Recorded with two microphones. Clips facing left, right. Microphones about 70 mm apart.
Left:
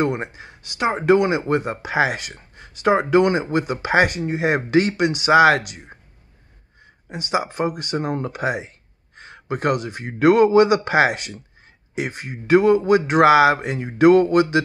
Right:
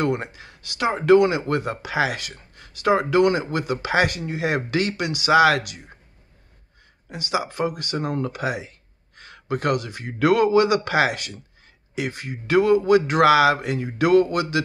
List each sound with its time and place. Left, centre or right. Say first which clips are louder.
0.0 s speech: left 1 dB; left
7.1 s speech: left 2 dB; left